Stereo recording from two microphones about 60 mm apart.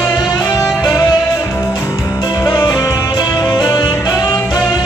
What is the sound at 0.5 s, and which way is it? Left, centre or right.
Music, left.